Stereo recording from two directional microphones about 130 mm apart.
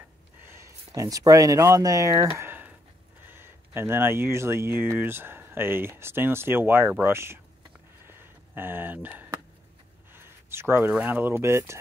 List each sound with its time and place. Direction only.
0.4 s speech: 20° right (ahead or behind)
8.0 s a sound: 15° right (ahead or behind)
10.1 s speech: 20° right (ahead or behind)